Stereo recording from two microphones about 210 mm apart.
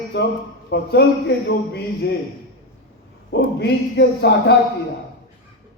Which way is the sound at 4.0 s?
55° left (ahead or behind).